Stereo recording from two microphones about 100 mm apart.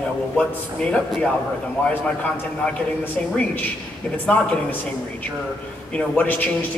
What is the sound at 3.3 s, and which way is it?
A man's voice, 15° left (ahead or behind).